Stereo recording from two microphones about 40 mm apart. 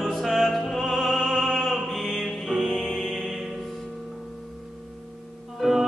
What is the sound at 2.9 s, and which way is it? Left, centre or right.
Music, centre.